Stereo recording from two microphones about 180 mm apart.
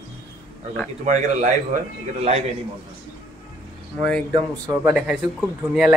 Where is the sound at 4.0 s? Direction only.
5° left (ahead or behind).